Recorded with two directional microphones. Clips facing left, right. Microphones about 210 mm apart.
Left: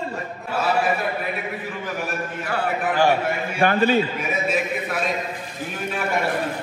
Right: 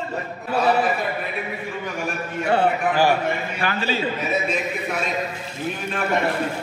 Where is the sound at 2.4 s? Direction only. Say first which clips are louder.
Right 8 dB; 25° right (ahead or behind).